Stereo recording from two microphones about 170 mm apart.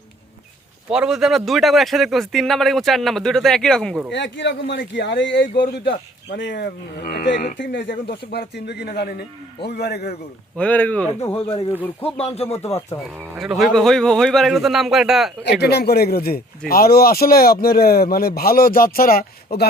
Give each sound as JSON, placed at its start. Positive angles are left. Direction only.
{"t": 0.9, "sound": "a man's voice", "side_deg": -5}
{"t": 4.1, "sound": "speech", "side_deg": 90}
{"t": 6.3, "sound": "speech", "side_deg": 90}
{"t": 7.6, "sound": "speech", "side_deg": 90}
{"t": 10.6, "sound": "a man's voice", "side_deg": 10}
{"t": 11.3, "sound": "speech", "side_deg": 35}
{"t": 13.4, "sound": "a man's voice", "side_deg": 0}
{"t": 15.6, "sound": "speech", "side_deg": 70}